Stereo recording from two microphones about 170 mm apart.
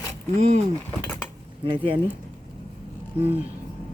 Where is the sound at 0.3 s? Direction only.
40° right (ahead or behind).